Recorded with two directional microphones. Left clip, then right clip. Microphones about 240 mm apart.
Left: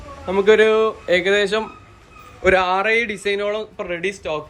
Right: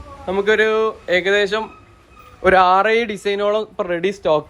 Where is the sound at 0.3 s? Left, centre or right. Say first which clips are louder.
Left 2 dB; centre.